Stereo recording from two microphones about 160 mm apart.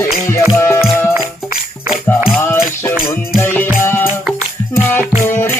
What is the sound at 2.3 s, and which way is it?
Music, 15° left (ahead or behind).